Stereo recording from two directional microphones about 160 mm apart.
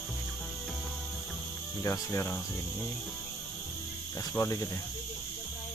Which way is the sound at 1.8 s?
15° left (ahead or behind).